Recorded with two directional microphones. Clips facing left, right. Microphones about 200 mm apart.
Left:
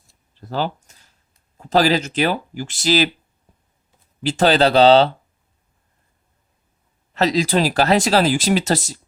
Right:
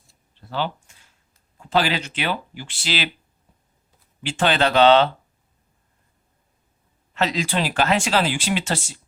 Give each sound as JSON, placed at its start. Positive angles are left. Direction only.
{"t": 0.3, "sound": "a sound", "side_deg": 40}
{"t": 1.5, "sound": "speech", "side_deg": 40}
{"t": 4.2, "sound": "speech", "side_deg": 40}
{"t": 7.1, "sound": "speech", "side_deg": 35}